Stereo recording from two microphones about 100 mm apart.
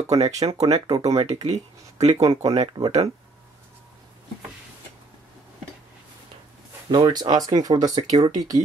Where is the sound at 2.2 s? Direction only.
35° right (ahead or behind).